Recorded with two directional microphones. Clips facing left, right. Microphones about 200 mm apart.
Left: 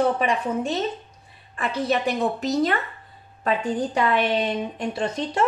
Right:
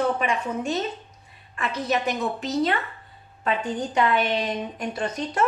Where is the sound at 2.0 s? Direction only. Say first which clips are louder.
Left 3 dB; 40° left (ahead or behind).